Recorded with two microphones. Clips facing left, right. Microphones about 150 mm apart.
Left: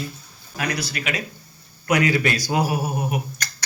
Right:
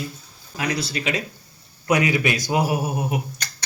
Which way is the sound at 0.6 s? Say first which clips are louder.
Right 1 dB; 20° right (ahead or behind).